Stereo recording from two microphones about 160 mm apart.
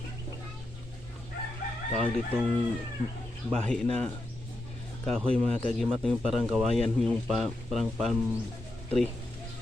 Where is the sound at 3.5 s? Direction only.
5° left (ahead or behind).